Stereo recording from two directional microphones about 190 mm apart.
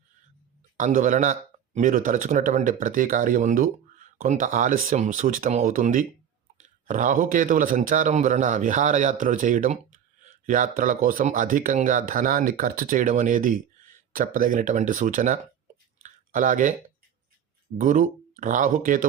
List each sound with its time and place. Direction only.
0.8 s speech: 40° right (ahead or behind)
16.0 s clicking: 45° right (ahead or behind)
17.7 s speech: 40° right (ahead or behind)